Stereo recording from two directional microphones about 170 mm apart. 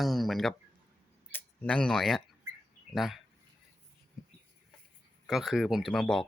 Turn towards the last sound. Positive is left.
turn(degrees=5)  # may be behind; listen again after turning